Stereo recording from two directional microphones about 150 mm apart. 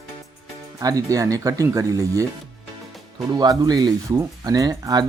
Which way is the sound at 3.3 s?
25° right (ahead or behind).